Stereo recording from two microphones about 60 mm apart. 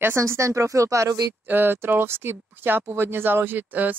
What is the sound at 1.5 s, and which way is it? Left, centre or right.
Speech, right.